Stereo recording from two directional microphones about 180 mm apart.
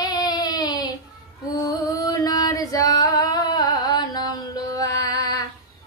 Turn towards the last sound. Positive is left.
turn(degrees=20)  # may be behind; listen again after turning